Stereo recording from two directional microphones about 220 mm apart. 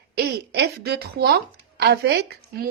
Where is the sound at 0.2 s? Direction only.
50° right (ahead or behind).